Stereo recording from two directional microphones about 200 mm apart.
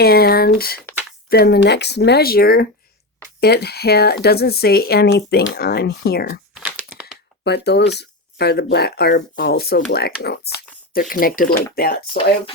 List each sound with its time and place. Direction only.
0.0 s speech: 50° left (ahead or behind)
6.5 s crumpling: 5° right (ahead or behind)
7.4 s speech: 55° left (ahead or behind)